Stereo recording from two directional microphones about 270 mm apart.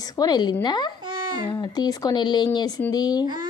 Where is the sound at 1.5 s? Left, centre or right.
Centre.